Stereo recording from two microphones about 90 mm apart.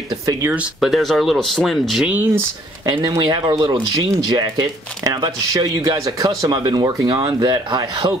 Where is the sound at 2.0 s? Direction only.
20° right (ahead or behind).